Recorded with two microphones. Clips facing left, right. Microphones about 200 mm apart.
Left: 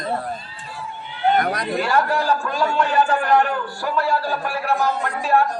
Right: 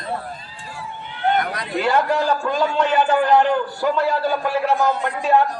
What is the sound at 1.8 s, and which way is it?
A man's voice, 20° right (ahead or behind).